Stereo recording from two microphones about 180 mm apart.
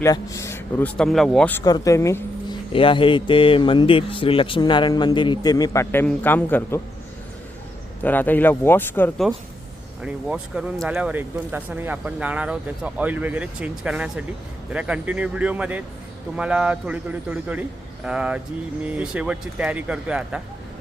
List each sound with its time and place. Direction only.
0.0 s speech: 15° left (ahead or behind)
1.6 s a woman's voice: 20° left (ahead or behind)
2.7 s speech: 30° left (ahead or behind); by 6.8 s 10° left (ahead or behind)
8.0 s speech: 10° left (ahead or behind)
10.0 s speech: 5° right (ahead or behind)